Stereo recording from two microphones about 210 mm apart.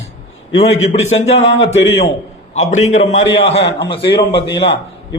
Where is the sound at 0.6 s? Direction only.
30° left (ahead or behind).